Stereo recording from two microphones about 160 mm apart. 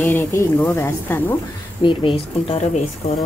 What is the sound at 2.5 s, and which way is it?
Speech, 40° left (ahead or behind).